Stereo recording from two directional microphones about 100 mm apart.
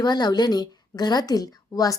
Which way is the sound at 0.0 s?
45° left (ahead or behind).